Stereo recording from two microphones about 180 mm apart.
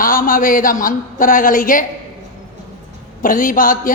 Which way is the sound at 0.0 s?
50° left (ahead or behind).